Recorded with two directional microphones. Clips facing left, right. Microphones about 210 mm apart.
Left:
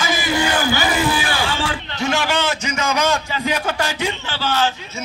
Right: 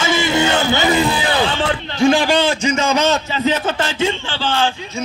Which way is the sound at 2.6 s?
10° left (ahead or behind).